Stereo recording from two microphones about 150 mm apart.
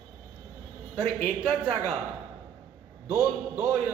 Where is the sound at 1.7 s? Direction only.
50° right (ahead or behind).